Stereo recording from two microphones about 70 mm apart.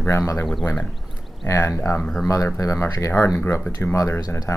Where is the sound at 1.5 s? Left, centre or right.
Left.